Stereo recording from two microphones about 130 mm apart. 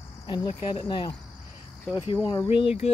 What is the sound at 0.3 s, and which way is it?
Speech, 35° left (ahead or behind).